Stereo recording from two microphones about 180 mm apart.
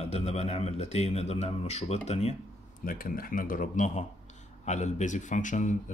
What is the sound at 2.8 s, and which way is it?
Speech, 50° left (ahead or behind).